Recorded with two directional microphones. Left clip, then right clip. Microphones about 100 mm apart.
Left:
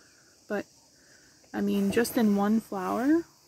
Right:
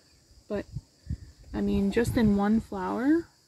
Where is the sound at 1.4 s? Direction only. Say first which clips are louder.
Even; 20° right (ahead or behind); by 3.2 s 40° right (ahead or behind).